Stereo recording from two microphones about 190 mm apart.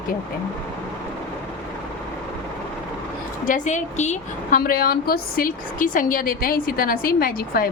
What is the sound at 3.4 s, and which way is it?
A woman's voice, 40° left (ahead or behind).